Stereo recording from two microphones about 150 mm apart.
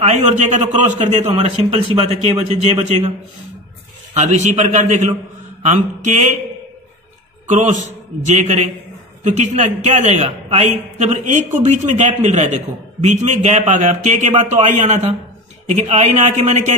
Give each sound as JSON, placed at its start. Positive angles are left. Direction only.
{"t": 0.0, "sound": "a man's voice", "side_deg": -50}
{"t": 4.2, "sound": "a man's voice", "side_deg": -50}
{"t": 7.4, "sound": "a man's voice", "side_deg": -50}